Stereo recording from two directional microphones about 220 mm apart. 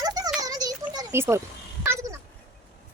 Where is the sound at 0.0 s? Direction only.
15° right (ahead or behind).